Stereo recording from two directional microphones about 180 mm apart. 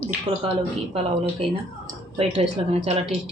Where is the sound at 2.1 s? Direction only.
35° right (ahead or behind).